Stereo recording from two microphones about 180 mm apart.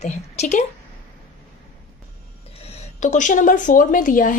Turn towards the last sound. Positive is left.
turn(degrees=50)  # may be behind; listen again after turning